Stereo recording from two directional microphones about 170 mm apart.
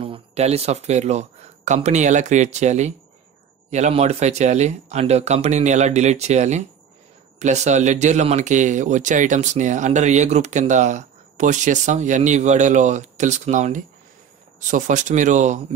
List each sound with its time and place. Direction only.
0.0 s speech: 35° right (ahead or behind)